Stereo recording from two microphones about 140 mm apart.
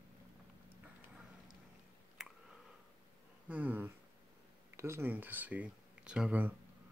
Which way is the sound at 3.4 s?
10° right (ahead or behind).